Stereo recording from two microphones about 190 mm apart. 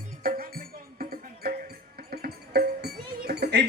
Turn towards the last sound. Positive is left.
turn(degrees=-60)  # may be behind; listen again after turning